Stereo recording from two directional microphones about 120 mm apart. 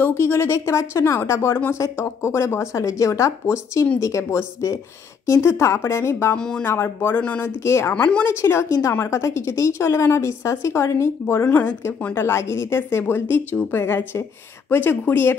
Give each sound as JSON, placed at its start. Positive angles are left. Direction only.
{"t": 0.0, "sound": "a woman's voice", "side_deg": 20}
{"t": 6.3, "sound": "speech", "side_deg": 5}
{"t": 6.6, "sound": "a woman's voice", "side_deg": 20}
{"t": 7.9, "sound": "a woman's voice", "side_deg": 10}